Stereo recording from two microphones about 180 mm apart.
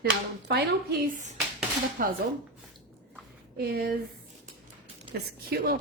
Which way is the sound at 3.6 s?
60° right (ahead or behind).